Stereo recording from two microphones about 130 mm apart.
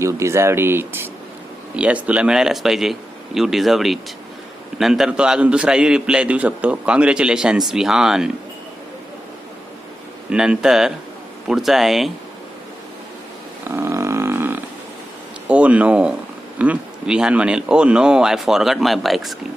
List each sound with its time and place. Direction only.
0.0 s a man's voice: 20° right (ahead or behind); by 8.3 s 5° right (ahead or behind)
10.3 s speech: 5° right (ahead or behind)
13.7 s a sound: 20° right (ahead or behind)
15.4 s a man's voice: 10° right (ahead or behind)